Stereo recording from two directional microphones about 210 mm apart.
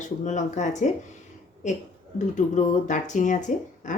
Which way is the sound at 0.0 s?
35° left (ahead or behind).